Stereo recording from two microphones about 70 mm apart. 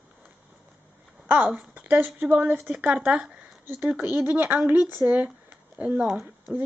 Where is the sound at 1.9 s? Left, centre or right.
Right; by 3.3 s centre.